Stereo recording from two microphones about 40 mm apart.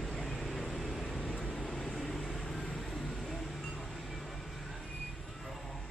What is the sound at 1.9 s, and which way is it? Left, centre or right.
Vehicle, centre.